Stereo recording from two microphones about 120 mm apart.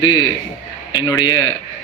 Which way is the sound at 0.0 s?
40° left (ahead or behind).